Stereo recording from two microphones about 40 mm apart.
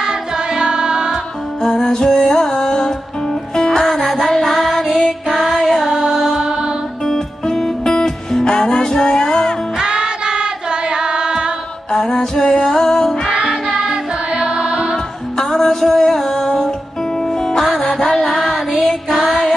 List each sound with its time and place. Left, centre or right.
0.0 s music: centre
1.8 s music: centre
6.4 s music: right
7.1 s music: centre
9.8 s music: centre
11.9 s music: centre
14.3 s music: centre
15.3 s music: centre